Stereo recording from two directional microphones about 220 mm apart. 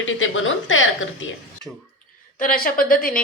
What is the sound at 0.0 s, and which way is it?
Speech, 65° left (ahead or behind).